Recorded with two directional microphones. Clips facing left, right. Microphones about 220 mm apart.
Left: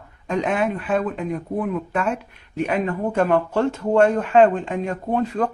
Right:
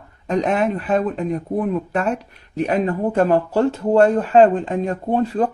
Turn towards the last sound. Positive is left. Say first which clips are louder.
# right 3 dB
turn(degrees=-35)  # may be behind; listen again after turning